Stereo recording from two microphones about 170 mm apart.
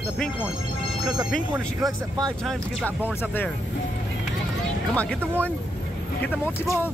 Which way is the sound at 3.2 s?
10° left (ahead or behind).